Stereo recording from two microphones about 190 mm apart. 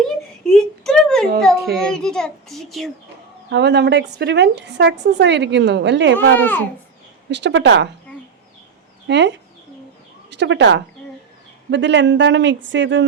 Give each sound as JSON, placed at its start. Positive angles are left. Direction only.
{"t": 0.4, "sound": "a sound", "side_deg": 5}
{"t": 1.7, "sound": "a child's voice", "side_deg": 5}
{"t": 3.5, "sound": "a woman's voice", "side_deg": -65}
{"t": 6.3, "sound": "speech", "side_deg": 10}
{"t": 7.3, "sound": "speech", "side_deg": -65}
{"t": 9.0, "sound": "speech", "side_deg": -65}